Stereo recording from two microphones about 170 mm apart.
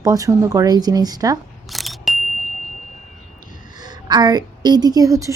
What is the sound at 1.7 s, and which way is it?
Single-lens reflex camera, centre (ahead or behind).